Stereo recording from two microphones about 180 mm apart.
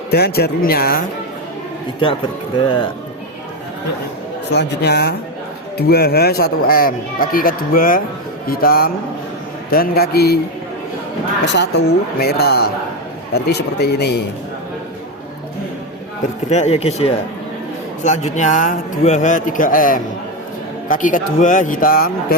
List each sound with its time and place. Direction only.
0.1 s speech: 60° left (ahead or behind)
2.6 s speech: 25° left (ahead or behind)
4.5 s speech: 65° left (ahead or behind)
11.4 s speech: 75° left (ahead or behind)
16.5 s a man's voice: 40° left (ahead or behind); by 22.4 s 55° left (ahead or behind)